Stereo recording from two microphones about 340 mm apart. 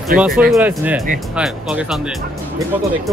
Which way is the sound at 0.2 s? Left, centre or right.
Centre.